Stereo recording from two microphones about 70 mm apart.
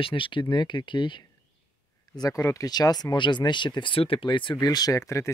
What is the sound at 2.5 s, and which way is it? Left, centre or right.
Speech, left.